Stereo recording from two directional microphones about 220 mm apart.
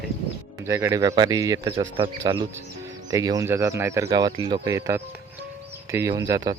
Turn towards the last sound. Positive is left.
turn(degrees=-15)  # may be behind; listen again after turning